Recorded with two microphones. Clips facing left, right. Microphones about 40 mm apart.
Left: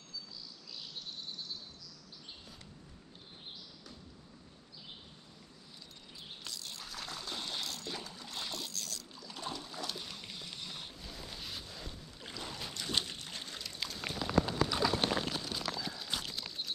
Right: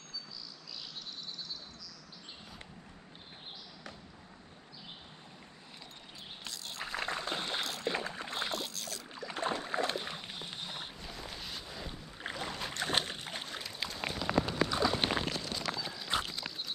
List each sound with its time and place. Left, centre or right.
6.4 s a sound: right
9.1 s boat: right
11.0 s boat: centre
11.6 s boat: centre
12.2 s boat: right
12.4 s boat: right
12.7 s boat: right
13.7 s a sound: centre
15.3 s clip-clop: centre
16.1 s clip-clop: right